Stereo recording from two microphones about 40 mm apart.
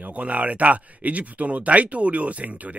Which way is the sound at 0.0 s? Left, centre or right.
Right.